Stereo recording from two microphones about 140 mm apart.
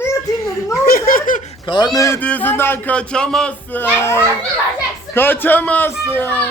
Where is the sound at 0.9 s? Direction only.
90° left.